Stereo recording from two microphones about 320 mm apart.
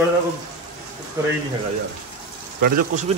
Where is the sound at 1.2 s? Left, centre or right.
Centre.